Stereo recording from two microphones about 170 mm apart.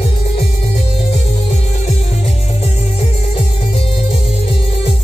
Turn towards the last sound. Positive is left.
turn(degrees=35)  # may be behind; listen again after turning